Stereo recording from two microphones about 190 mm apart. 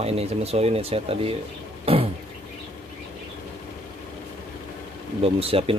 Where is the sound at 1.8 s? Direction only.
30° right (ahead or behind).